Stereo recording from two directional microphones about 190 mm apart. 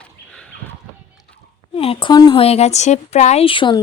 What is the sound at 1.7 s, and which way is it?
A woman's voice, 30° left (ahead or behind).